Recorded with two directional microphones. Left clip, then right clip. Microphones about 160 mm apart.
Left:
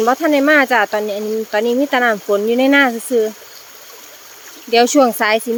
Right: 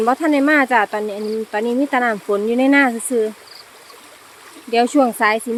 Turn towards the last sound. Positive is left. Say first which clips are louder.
# left 3 dB
turn(degrees=20)  # may be behind; listen again after turning